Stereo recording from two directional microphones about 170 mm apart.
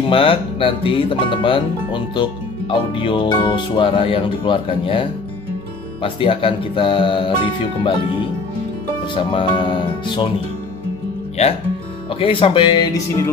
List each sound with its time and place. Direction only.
0.1 s speech: 30° left (ahead or behind)
6.0 s speech: 30° left (ahead or behind)
9.1 s speech: 30° left (ahead or behind)
11.4 s speech: 35° left (ahead or behind); by 13.3 s 20° left (ahead or behind)